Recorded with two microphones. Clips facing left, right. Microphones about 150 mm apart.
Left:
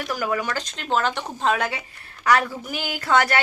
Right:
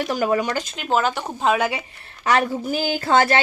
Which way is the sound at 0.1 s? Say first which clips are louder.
Right 3 dB; 25° right (ahead or behind).